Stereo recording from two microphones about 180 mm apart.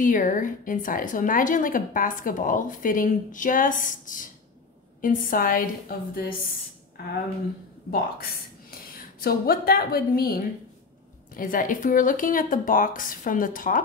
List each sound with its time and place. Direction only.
0.0 s a woman's voice: 45° left (ahead or behind)
7.9 s a woman's voice: 55° left (ahead or behind)